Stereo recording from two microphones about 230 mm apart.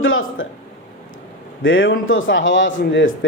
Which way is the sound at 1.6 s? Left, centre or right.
Left.